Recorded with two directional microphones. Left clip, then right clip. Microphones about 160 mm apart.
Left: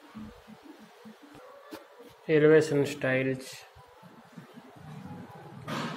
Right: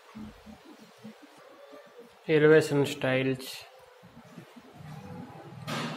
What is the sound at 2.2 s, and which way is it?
Speech, 15° right (ahead or behind).